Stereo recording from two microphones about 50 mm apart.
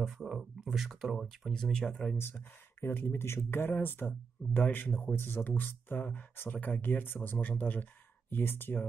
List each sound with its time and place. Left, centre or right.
0.0 s speech: centre
1.5 s speech: centre
2.1 s speech: left
5.1 s speech: left
8.3 s speech: left